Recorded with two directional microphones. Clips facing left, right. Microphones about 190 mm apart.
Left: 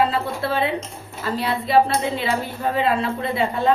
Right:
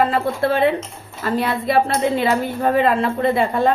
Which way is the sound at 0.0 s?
50° right (ahead or behind).